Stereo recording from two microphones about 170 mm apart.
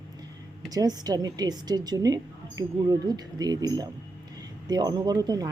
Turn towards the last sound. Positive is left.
turn(degrees=-20)  # may be behind; listen again after turning